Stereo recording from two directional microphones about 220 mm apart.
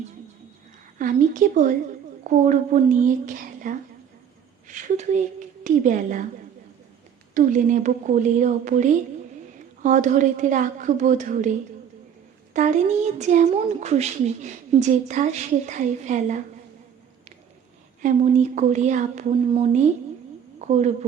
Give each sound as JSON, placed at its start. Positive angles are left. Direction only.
{"t": 0.9, "sound": "a child's voice", "side_deg": -35}
{"t": 7.3, "sound": "a child's voice", "side_deg": -35}
{"t": 12.5, "sound": "a child's voice", "side_deg": -30}
{"t": 18.0, "sound": "a child's voice", "side_deg": -30}